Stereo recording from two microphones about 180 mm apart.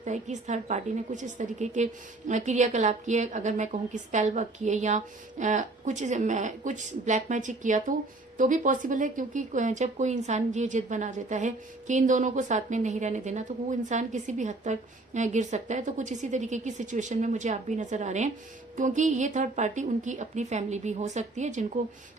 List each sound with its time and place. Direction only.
0.0 s a woman's voice: 40° right (ahead or behind)